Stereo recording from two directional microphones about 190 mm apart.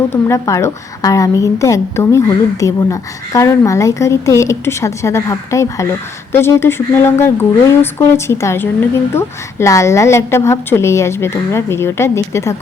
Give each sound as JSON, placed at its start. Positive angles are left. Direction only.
{"t": 0.1, "sound": "a woman's voice", "side_deg": 15}